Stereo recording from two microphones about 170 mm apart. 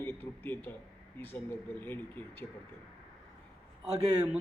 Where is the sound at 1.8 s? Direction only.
10° left (ahead or behind).